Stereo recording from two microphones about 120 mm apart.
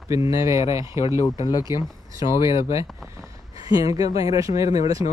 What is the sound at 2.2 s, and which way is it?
Speech, 45° left (ahead or behind).